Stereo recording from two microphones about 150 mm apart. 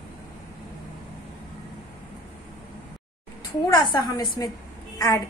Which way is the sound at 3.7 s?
30° left (ahead or behind).